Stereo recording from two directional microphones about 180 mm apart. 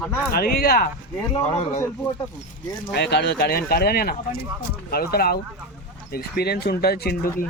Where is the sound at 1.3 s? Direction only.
35° left (ahead or behind).